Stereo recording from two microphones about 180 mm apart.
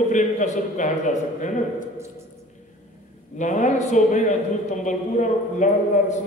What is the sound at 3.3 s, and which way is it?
A man's voice, 45° left (ahead or behind).